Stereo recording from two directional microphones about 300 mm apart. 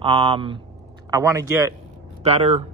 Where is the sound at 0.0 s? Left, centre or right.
Centre.